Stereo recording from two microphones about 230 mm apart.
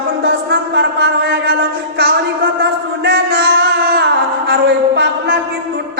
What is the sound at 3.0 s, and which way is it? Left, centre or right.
Music, right.